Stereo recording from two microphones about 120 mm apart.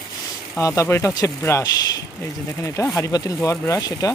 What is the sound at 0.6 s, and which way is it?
Speech, 25° left (ahead or behind).